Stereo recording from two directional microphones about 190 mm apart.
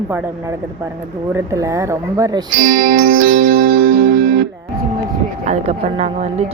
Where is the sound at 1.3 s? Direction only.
15° right (ahead or behind).